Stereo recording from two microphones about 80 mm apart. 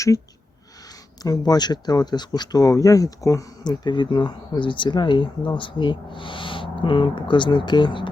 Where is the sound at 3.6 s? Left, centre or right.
Left.